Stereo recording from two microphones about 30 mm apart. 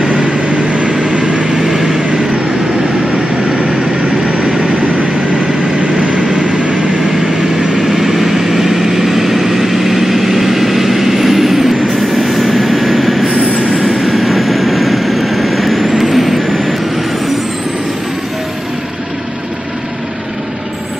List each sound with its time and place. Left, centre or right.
0.0 s vehicle: right
1.6 s vehicle: right
1.9 s vehicle: right
5.9 s vehicle: right
7.7 s vehicle: centre
13.3 s train: right
14.0 s vehicle: centre